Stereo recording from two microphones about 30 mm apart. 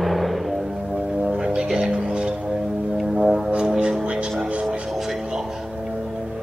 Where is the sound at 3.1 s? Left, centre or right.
Centre.